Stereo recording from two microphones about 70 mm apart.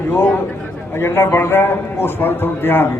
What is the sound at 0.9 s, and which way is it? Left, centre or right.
A man's voice, left.